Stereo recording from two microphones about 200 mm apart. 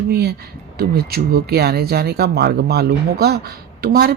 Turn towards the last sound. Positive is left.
turn(degrees=-50)  # may be behind; listen again after turning